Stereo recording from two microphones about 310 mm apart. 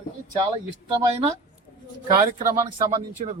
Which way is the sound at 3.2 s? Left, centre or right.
Right.